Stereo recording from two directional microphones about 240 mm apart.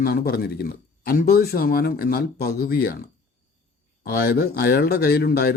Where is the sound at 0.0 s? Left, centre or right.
Left.